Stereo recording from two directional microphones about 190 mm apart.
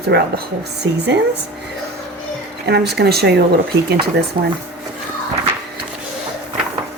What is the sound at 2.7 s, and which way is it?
Speech, 60° right (ahead or behind).